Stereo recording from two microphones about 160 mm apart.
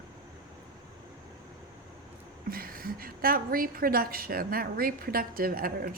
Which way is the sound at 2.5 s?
65° right (ahead or behind).